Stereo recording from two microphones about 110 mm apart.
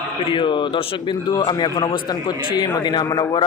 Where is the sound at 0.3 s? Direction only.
45° left (ahead or behind).